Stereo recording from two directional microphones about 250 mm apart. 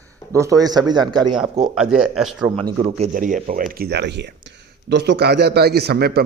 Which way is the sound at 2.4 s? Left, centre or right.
Right.